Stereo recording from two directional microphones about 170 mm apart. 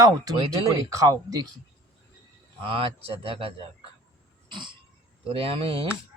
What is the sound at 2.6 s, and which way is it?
Speech, 35° right (ahead or behind).